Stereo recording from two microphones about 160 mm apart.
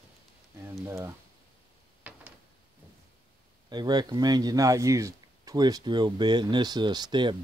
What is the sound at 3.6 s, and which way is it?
Speech, 25° right (ahead or behind).